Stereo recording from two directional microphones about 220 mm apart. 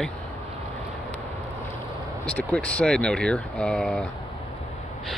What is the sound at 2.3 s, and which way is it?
Speech, 5° left (ahead or behind).